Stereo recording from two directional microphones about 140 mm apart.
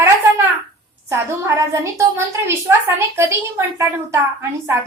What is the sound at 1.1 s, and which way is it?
A woman's voice, 20° right (ahead or behind).